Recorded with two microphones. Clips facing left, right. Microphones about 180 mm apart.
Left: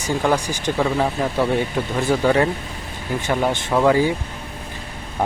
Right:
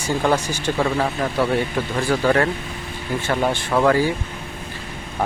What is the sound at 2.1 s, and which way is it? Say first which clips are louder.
Speech: left 1 dB; 15° left (ahead or behind).